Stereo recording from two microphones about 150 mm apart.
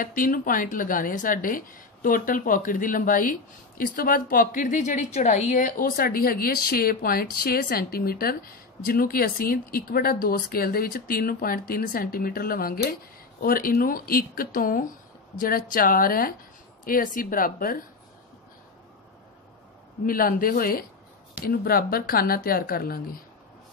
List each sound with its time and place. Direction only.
0.0 s a woman's voice: 65° left (ahead or behind)
20.1 s a woman's voice: 70° left (ahead or behind)